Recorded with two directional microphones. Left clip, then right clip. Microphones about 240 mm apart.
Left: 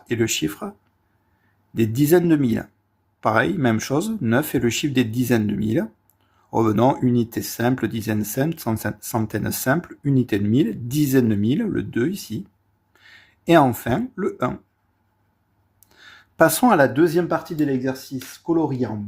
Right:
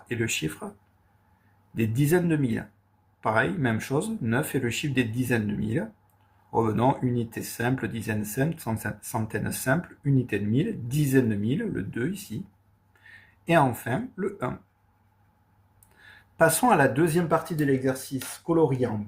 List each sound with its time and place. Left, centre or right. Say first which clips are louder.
0.1 s speech: left 6 dB; left
1.7 s speech: left 7 dB; left
16.0 s speech: left 5 dB; left
18.5 s speech: left 3 dB; left